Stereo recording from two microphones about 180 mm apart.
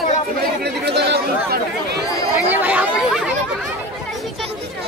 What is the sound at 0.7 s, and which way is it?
Chatter, 70° right (ahead or behind).